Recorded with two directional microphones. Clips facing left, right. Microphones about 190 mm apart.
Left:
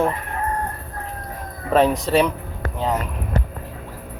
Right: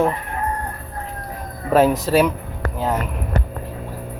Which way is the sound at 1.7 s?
5° right (ahead or behind).